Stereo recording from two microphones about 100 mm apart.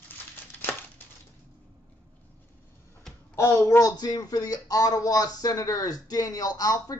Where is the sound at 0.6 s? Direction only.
20° left (ahead or behind).